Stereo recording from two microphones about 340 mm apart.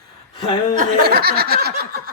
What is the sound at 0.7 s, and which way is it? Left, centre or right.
Snicker, right.